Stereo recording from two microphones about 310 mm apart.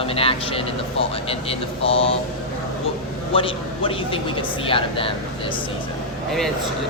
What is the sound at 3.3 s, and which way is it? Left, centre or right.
Speech, centre.